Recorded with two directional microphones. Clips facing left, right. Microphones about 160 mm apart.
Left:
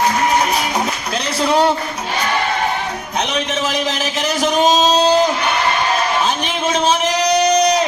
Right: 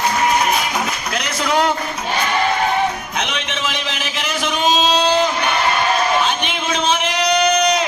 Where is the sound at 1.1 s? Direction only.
30° left (ahead or behind).